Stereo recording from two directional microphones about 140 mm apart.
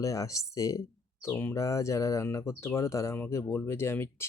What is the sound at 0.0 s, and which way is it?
Speech, 25° left (ahead or behind).